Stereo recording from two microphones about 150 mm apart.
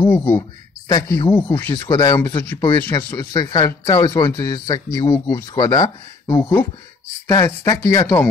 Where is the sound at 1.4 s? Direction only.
15° left (ahead or behind).